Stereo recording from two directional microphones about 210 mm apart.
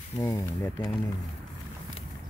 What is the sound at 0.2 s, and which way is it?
Speech, 15° left (ahead or behind).